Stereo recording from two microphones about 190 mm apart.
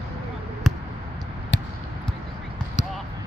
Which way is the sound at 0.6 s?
Centre (ahead or behind).